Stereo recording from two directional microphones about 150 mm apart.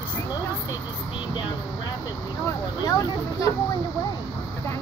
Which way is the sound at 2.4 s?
25° left (ahead or behind).